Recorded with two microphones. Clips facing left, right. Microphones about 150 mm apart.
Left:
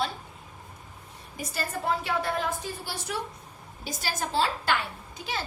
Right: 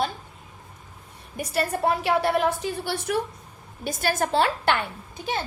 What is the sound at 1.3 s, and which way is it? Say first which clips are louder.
A woman's voice: right 7 dB; 65° right (ahead or behind).